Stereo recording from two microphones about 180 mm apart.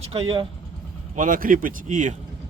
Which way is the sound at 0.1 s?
30° right (ahead or behind).